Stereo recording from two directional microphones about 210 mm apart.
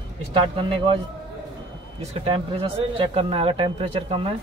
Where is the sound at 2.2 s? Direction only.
30° right (ahead or behind).